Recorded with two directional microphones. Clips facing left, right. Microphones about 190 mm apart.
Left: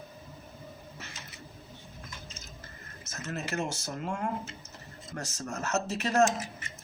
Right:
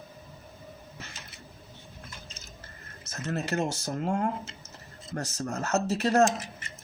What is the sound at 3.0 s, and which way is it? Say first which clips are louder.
Speech: right 5 dB; 35° right (ahead or behind).